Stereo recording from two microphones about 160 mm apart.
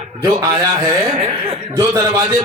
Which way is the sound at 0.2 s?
25° right (ahead or behind).